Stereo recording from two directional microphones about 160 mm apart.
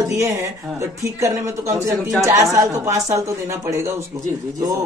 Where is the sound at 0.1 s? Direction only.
15° right (ahead or behind).